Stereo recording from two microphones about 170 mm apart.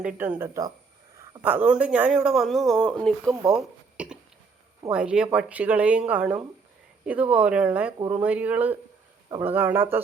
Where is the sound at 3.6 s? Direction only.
5° right (ahead or behind).